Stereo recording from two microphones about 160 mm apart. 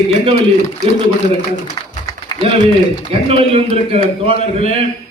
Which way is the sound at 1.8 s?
25° left (ahead or behind).